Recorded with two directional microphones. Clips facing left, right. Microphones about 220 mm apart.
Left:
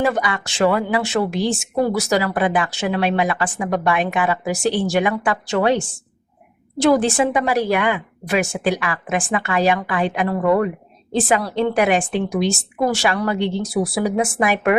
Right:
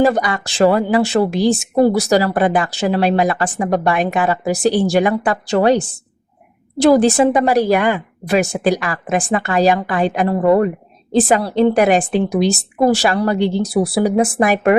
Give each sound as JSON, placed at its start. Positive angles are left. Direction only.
{"t": 0.0, "sound": "speech", "side_deg": -40}